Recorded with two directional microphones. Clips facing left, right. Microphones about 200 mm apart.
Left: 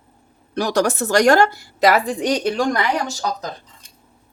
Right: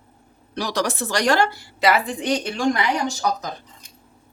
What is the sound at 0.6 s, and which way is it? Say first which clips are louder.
A woman's voice: left 5 dB; 45° left (ahead or behind).